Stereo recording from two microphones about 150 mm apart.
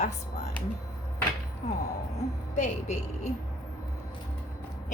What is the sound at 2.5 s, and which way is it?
Speech, 55° left (ahead or behind).